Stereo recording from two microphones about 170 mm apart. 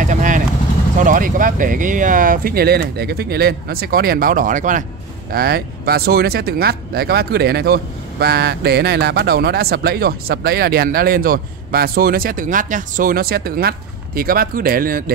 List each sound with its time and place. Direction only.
0.0 s vehicle: 50° right (ahead or behind)
0.9 s speech: 50° right (ahead or behind)
5.3 s speech: 65° right (ahead or behind)